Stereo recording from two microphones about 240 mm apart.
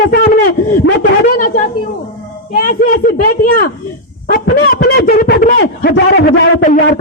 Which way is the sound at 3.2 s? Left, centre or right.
Left.